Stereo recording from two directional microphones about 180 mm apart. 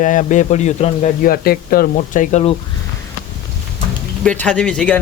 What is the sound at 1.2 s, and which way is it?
Speech, 55° left (ahead or behind).